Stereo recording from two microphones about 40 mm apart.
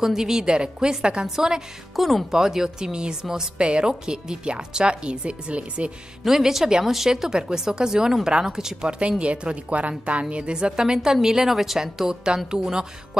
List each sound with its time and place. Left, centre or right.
0.0 s speech: centre
2.0 s speech: centre
2.3 s a woman's voice: centre; by 5.9 s right
6.2 s speech: centre
9.2 s speech: right
10.3 s a woman's voice: right
10.8 s speech: centre